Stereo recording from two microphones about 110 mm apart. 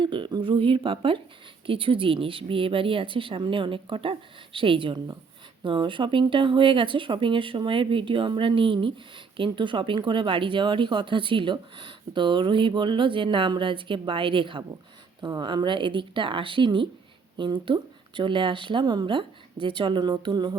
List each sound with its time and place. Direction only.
0.0 s a woman's voice: 50° right (ahead or behind)